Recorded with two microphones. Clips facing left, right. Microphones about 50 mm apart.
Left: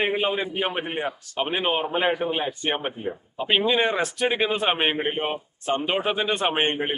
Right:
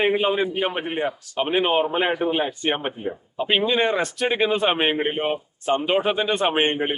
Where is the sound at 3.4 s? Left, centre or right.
Centre.